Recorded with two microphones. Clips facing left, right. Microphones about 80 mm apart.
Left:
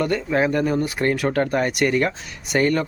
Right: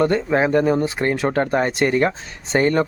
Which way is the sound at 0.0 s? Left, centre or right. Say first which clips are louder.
Right 3 dB; right.